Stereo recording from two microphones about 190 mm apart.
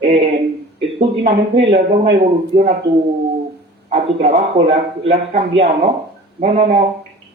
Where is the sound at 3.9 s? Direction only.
30° right (ahead or behind).